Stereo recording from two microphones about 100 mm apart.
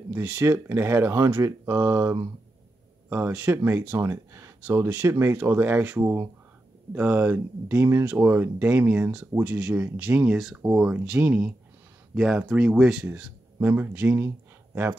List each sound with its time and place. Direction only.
0.1 s speech: 20° right (ahead or behind)
4.0 s speech: 30° right (ahead or behind)
4.6 s speech: 20° right (ahead or behind)
10.3 s speech: 5° right (ahead or behind)
10.6 s speech: 15° right (ahead or behind)
12.1 s speech: 5° right (ahead or behind)
13.0 s speech: 15° right (ahead or behind)